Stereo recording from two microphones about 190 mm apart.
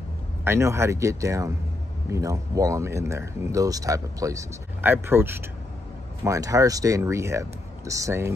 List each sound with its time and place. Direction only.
0.4 s speech: 15° right (ahead or behind)